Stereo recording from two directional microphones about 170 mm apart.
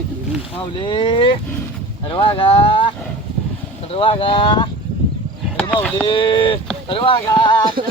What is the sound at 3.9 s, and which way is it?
Speech, 30° left (ahead or behind).